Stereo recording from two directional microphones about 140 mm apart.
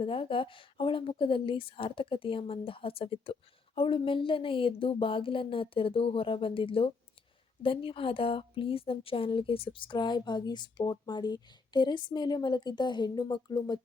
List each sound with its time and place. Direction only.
0.0 s a woman's voice: 40° left (ahead or behind)